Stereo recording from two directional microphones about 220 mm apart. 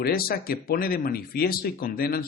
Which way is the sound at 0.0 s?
45° left (ahead or behind).